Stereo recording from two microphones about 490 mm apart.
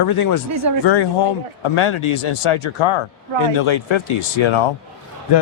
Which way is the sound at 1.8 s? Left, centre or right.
Left.